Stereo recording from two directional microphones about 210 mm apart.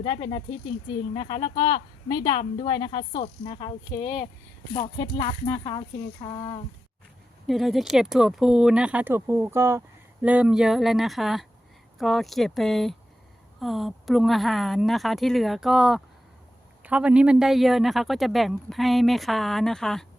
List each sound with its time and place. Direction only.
0.0 s a woman's voice: 25° left (ahead or behind)
7.4 s speech: centre (ahead or behind)